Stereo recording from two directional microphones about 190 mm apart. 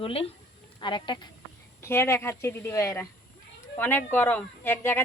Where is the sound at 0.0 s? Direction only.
30° left (ahead or behind).